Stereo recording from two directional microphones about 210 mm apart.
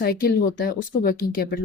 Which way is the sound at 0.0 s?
45° left (ahead or behind).